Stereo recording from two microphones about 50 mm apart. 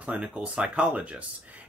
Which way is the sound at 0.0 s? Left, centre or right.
Right.